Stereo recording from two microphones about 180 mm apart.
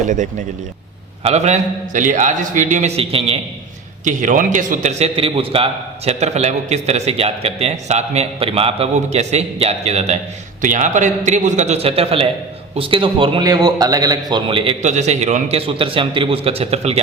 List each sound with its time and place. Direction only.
0.1 s a man's voice: 45° right (ahead or behind)
4.0 s a man's voice: 45° right (ahead or behind)